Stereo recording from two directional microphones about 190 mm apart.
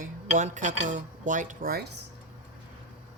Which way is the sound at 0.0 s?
40° right (ahead or behind).